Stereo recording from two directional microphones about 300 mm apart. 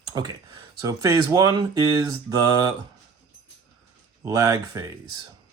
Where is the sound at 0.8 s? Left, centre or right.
Centre.